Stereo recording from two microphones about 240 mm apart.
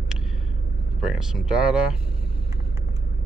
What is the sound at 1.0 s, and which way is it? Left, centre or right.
Speech, centre.